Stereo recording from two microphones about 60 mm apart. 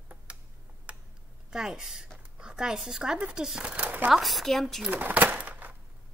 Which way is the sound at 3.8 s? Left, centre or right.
Right.